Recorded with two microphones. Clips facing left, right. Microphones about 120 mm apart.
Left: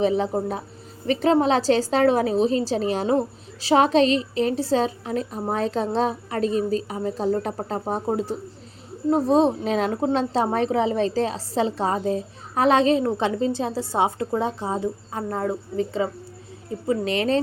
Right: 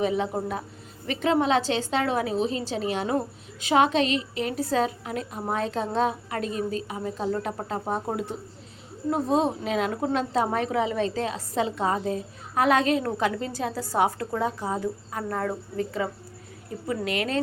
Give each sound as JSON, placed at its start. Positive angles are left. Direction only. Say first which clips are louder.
{"t": 0.0, "sound": "a woman's voice", "louder": "left 4 dB", "side_deg": 30}